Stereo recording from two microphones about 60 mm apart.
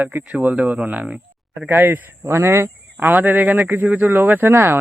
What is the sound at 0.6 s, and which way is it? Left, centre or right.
Speech, right.